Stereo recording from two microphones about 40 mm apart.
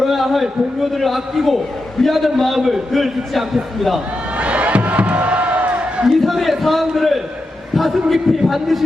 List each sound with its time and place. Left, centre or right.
0.0 s a man's voice: centre
4.4 s music: right
6.1 s a man's voice: centre